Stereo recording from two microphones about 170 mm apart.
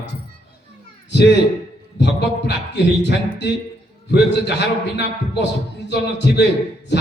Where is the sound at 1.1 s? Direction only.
90° left.